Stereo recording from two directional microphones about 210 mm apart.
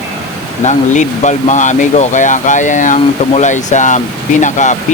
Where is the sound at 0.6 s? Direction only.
35° left (ahead or behind).